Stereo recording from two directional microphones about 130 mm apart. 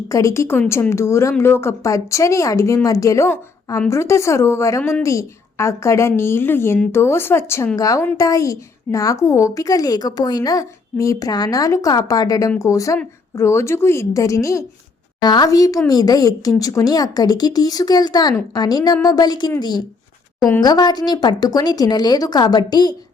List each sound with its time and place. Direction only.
0.1 s a child's voice: 25° left (ahead or behind)
4.8 s speech: 10° left (ahead or behind)
5.0 s a child's voice: 25° left (ahead or behind)